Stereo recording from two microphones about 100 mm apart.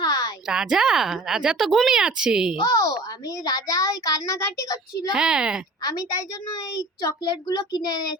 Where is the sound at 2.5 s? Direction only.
35° left (ahead or behind).